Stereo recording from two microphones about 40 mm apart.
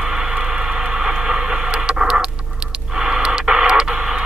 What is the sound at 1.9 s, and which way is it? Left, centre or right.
Patter, right.